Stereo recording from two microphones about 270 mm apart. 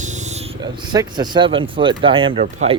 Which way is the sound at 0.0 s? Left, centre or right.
Right.